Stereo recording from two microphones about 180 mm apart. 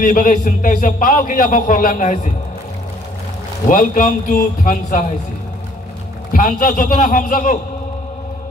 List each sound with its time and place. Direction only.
0.0 s a man's voice: 50° left (ahead or behind)
3.6 s a man's voice: 50° left (ahead or behind)
6.3 s a man's voice: 50° left (ahead or behind)